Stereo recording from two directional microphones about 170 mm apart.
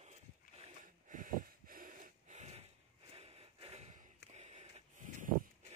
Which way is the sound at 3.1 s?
35° right (ahead or behind).